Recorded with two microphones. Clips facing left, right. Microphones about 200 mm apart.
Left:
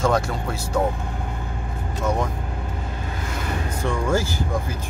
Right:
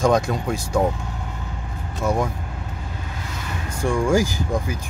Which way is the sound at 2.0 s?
10° right (ahead or behind).